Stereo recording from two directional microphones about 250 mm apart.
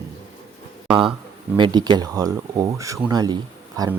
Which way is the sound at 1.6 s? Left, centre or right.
Centre.